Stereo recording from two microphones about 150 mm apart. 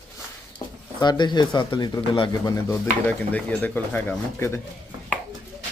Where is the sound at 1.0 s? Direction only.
30° left (ahead or behind).